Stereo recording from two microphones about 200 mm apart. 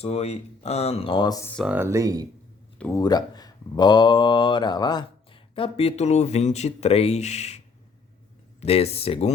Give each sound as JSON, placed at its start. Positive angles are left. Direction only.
{"t": 0.0, "sound": "speech", "side_deg": 30}
{"t": 1.5, "sound": "speech", "side_deg": -5}
{"t": 2.7, "sound": "speech", "side_deg": 5}
{"t": 3.0, "sound": "speech", "side_deg": 20}
{"t": 8.6, "sound": "speech", "side_deg": 30}